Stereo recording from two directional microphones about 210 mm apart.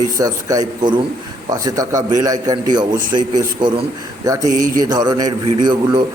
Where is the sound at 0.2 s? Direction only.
15° right (ahead or behind).